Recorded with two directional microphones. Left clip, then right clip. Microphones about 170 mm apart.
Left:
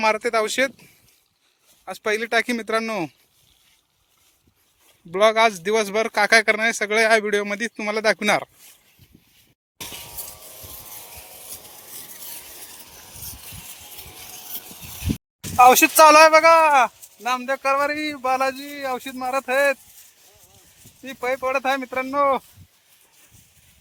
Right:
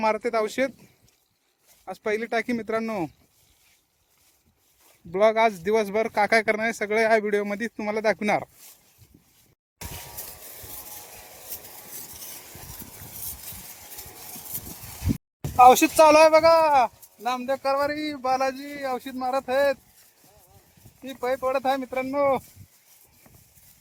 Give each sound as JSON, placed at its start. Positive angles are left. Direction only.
{"t": 0.0, "sound": "speech", "side_deg": -10}
{"t": 1.8, "sound": "speech", "side_deg": -10}
{"t": 5.1, "sound": "speech", "side_deg": -15}
{"t": 11.5, "sound": "a sound", "side_deg": 0}
{"t": 15.5, "sound": "speech", "side_deg": 0}
{"t": 17.7, "sound": "a man's voice", "side_deg": 15}
{"t": 21.0, "sound": "speech", "side_deg": -10}
{"t": 21.2, "sound": "speech", "side_deg": 5}